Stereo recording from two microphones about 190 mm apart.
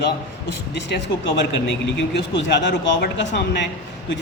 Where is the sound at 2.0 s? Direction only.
65° left (ahead or behind).